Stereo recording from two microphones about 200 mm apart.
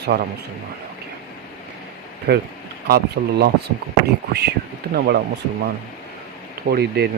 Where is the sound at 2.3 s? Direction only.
55° right (ahead or behind).